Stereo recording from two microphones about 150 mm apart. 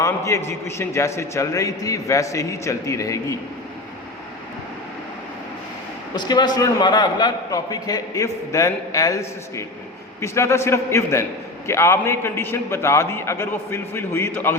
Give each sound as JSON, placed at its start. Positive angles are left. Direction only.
{"t": 0.0, "sound": "a man's voice", "side_deg": 20}
{"t": 6.1, "sound": "a man's voice", "side_deg": 30}